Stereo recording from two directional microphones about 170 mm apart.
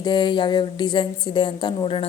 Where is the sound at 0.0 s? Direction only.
25° left (ahead or behind).